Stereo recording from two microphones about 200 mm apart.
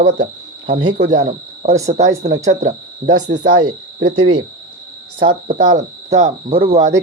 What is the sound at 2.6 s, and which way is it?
Speech, 20° right (ahead or behind).